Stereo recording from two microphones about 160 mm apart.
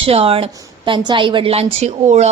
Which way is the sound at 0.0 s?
35° right (ahead or behind).